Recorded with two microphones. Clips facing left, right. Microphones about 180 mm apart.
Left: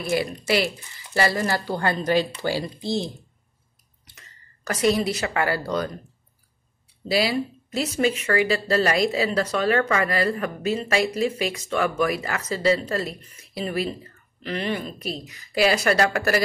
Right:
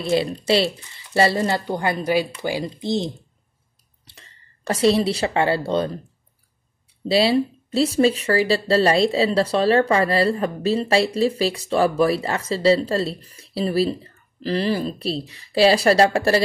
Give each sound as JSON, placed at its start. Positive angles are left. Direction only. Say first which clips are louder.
{"t": 0.0, "sound": "speech", "louder": "right 4 dB", "side_deg": -25}
{"t": 4.0, "sound": "a woman's voice", "louder": "right 2 dB", "side_deg": -30}
{"t": 7.1, "sound": "speech", "louder": "right 5 dB", "side_deg": -30}